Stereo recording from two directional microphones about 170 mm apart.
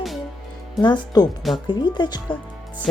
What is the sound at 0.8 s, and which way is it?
Speech, 25° left (ahead or behind).